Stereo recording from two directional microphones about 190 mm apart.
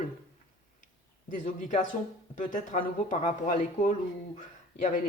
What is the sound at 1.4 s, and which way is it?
A woman's voice, 40° left (ahead or behind).